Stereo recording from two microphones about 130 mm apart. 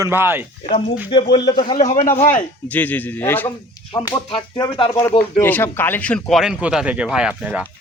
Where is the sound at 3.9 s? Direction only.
30° left (ahead or behind).